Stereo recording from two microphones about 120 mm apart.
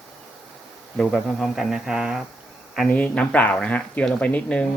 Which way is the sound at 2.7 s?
5° left (ahead or behind).